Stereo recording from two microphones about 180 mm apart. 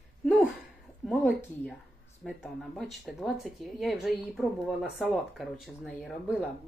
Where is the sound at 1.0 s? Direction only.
5° right (ahead or behind).